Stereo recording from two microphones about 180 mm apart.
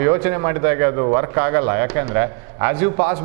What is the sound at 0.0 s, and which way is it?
A man's voice, 15° right (ahead or behind).